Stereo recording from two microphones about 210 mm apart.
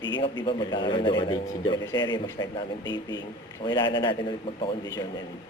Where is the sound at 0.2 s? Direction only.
20° left (ahead or behind).